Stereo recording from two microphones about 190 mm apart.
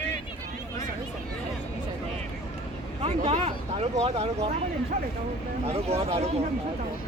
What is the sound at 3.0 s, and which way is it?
Speech, 35° right (ahead or behind).